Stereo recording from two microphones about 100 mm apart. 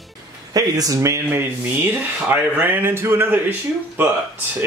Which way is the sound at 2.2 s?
20° right (ahead or behind).